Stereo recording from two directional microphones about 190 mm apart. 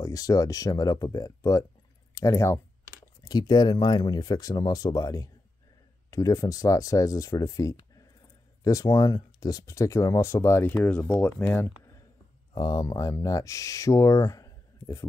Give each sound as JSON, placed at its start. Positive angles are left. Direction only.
{"t": 0.0, "sound": "speech", "side_deg": 20}